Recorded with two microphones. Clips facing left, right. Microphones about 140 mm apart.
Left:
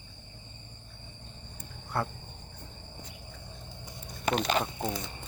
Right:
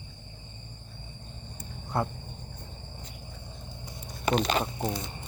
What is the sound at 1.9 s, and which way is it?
Cricket, 20° right (ahead or behind).